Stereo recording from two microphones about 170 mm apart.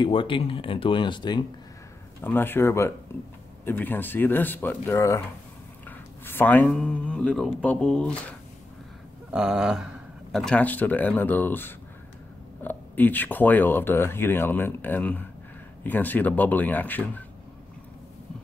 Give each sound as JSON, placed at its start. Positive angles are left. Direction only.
{"t": 0.0, "sound": "speech", "side_deg": 30}
{"t": 2.2, "sound": "speech", "side_deg": 10}
{"t": 9.3, "sound": "speech", "side_deg": -5}